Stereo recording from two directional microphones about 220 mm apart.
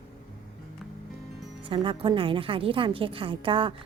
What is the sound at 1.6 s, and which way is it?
A woman's voice, 25° right (ahead or behind).